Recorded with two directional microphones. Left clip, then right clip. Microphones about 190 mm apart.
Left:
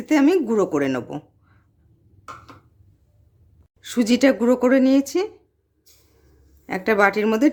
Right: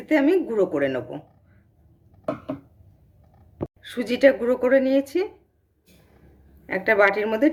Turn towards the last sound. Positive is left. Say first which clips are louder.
# left 1 dB
turn(degrees=60)  # may be behind; listen again after turning